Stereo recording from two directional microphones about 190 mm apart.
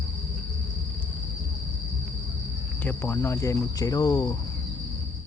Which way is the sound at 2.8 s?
10° left (ahead or behind).